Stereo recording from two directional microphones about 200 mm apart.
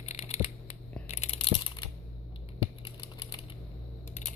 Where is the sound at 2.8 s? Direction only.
25° left (ahead or behind).